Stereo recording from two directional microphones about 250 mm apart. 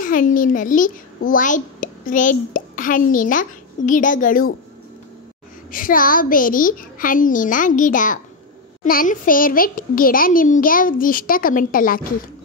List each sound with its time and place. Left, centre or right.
0.0 s a child's voice: left
5.7 s a child's voice: left